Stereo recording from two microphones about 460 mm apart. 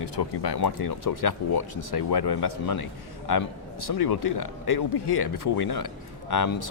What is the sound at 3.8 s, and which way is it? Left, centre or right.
Speech, left.